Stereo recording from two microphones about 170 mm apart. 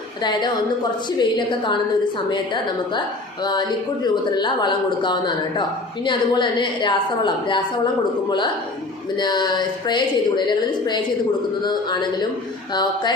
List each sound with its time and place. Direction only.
0.2 s a woman's voice: 25° left (ahead or behind)
4.0 s a woman's voice: 25° left (ahead or behind)
9.1 s a woman's voice: 25° left (ahead or behind)